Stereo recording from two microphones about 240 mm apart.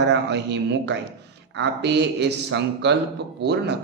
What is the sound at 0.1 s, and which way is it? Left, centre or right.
A man's voice, right.